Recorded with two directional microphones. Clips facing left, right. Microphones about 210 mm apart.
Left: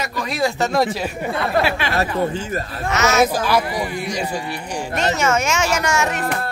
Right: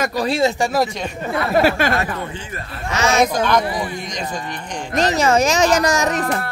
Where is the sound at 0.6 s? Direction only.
10° right (ahead or behind).